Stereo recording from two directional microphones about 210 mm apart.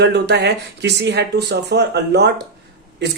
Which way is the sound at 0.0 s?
55° right (ahead or behind).